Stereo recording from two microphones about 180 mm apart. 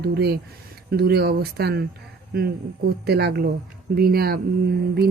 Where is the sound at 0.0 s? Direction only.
65° right (ahead or behind).